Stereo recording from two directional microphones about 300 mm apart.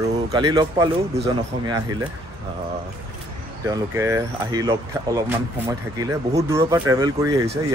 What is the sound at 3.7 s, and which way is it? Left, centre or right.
Speech, centre.